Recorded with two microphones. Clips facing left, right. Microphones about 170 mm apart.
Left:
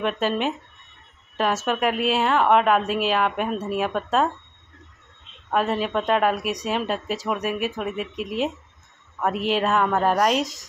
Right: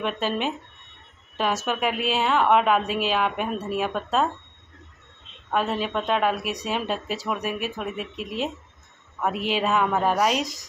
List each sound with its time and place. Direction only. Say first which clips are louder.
0.0 s a woman's voice: left 3 dB; centre (ahead or behind)
1.7 s a woman's voice: left 3 dB; centre (ahead or behind)
5.5 s a woman's voice: left 2 dB; centre (ahead or behind)